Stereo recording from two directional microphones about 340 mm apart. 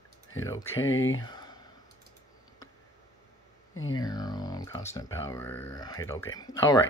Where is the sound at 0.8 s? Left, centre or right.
Left.